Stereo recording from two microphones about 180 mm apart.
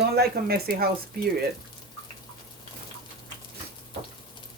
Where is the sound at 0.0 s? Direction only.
60° right (ahead or behind).